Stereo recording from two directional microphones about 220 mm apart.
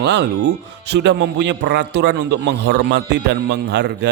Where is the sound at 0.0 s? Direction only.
50° right (ahead or behind).